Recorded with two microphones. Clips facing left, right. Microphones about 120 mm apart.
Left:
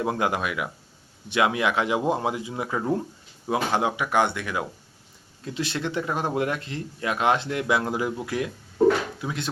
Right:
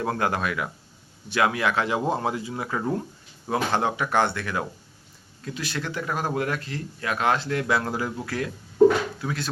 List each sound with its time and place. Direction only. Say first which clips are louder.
0.0 s speech: even; 15° left (ahead or behind)